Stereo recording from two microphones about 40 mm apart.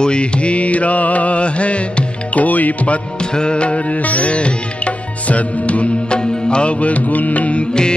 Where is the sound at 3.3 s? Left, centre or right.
Left.